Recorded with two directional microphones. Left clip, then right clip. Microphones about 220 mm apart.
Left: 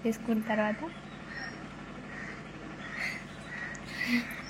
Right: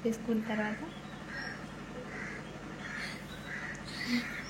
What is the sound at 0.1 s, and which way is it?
Speech, 15° left (ahead or behind).